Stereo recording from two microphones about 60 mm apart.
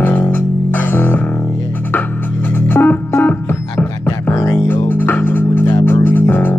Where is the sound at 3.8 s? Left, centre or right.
Left.